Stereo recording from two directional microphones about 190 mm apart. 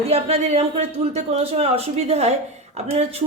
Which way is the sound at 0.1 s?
35° right (ahead or behind).